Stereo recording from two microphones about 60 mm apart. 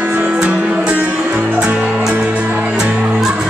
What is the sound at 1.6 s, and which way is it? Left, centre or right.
Music, centre.